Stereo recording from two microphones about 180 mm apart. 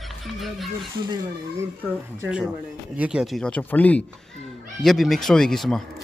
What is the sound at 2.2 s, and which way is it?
Speech, 5° right (ahead or behind).